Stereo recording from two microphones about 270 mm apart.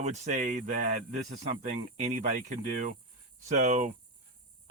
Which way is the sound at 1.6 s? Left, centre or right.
Right.